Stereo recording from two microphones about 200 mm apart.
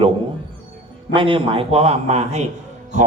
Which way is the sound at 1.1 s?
25° right (ahead or behind).